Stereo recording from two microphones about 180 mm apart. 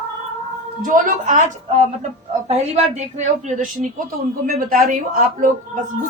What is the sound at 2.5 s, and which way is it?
A woman's voice, 35° right (ahead or behind).